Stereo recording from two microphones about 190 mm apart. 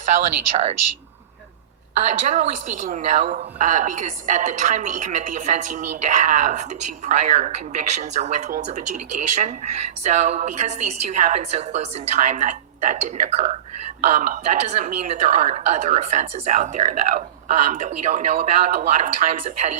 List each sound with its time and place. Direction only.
0.5 s a woman's voice: 35° right (ahead or behind)
2.0 s a woman's voice: 40° right (ahead or behind)